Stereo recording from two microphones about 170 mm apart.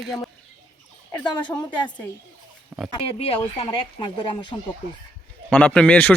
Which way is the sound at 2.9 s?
35° left (ahead or behind).